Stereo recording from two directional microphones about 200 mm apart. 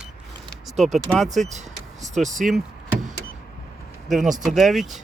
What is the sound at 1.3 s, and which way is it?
Speech, 35° right (ahead or behind).